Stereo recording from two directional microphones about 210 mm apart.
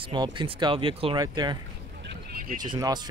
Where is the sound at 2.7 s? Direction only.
20° right (ahead or behind).